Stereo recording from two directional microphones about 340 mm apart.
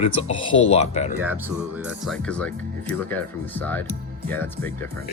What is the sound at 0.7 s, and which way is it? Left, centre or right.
Speech, centre.